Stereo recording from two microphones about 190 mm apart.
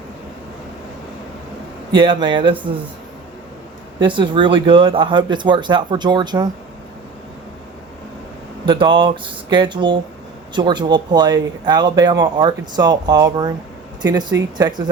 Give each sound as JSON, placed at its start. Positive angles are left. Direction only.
{"t": 2.0, "sound": "speech", "side_deg": -25}
{"t": 4.0, "sound": "speech", "side_deg": -25}
{"t": 8.6, "sound": "speech", "side_deg": -25}